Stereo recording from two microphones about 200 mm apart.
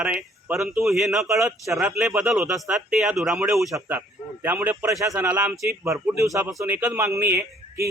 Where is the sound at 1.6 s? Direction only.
Centre (ahead or behind).